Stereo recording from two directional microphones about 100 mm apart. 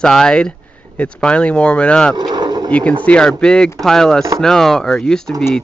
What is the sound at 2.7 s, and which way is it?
A child's voice, 10° left (ahead or behind).